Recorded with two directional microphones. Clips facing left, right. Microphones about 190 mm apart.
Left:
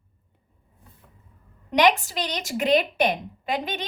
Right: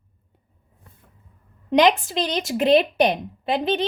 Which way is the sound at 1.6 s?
25° right (ahead or behind).